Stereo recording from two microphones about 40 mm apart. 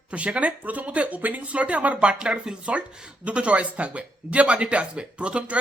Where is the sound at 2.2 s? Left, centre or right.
Right.